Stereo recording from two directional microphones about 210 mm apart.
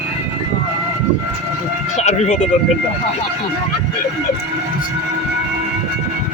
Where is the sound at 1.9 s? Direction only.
30° left (ahead or behind).